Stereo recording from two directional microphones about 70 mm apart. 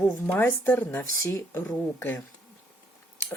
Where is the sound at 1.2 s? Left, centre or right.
Left.